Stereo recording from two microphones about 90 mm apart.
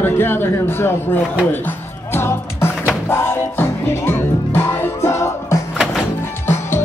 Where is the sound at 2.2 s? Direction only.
25° left (ahead or behind).